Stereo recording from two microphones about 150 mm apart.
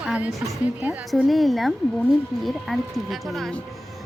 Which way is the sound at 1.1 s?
Centre (ahead or behind).